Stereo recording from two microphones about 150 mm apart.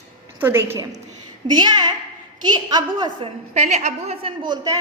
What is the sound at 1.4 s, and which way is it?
A woman's voice, 30° right (ahead or behind).